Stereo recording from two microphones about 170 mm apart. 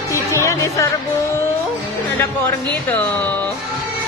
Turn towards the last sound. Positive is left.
turn(degrees=10)  # may be behind; listen again after turning